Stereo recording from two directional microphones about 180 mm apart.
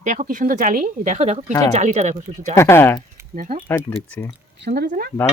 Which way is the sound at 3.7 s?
10° left (ahead or behind).